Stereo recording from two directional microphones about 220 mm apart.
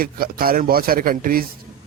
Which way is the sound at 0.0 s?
40° right (ahead or behind).